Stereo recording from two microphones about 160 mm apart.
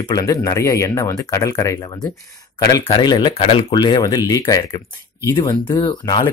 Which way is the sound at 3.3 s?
40° left (ahead or behind).